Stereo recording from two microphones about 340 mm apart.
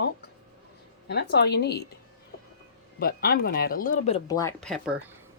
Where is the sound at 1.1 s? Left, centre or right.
Left.